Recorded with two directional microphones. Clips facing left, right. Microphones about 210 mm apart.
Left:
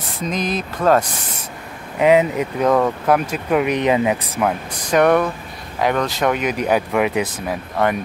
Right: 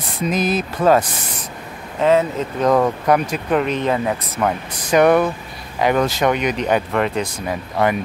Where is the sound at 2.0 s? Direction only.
15° left (ahead or behind).